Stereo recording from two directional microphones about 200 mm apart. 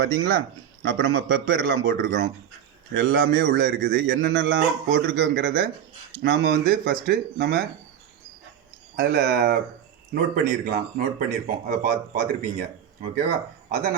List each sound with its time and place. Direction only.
0.0 s a man's voice: 65° right (ahead or behind)
9.0 s a man's voice: 45° right (ahead or behind)
13.7 s chopping: 40° right (ahead or behind)